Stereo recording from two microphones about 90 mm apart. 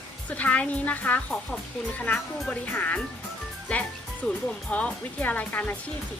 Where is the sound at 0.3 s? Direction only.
15° left (ahead or behind).